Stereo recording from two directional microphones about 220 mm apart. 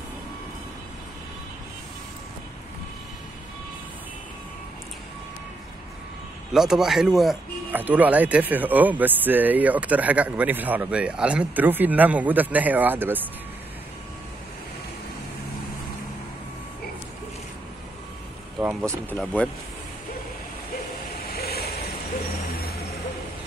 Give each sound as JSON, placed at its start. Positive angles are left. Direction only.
{"t": 6.5, "sound": "speech", "side_deg": 0}
{"t": 18.6, "sound": "speech", "side_deg": -10}
{"t": 19.0, "sound": "speech", "side_deg": 5}
{"t": 21.2, "sound": "vehicle", "side_deg": 45}